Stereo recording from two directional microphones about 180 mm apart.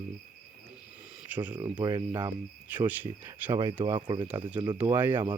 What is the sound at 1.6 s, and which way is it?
Speech, 20° right (ahead or behind).